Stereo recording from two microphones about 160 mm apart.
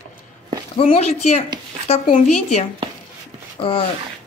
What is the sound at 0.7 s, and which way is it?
Speech, 40° left (ahead or behind).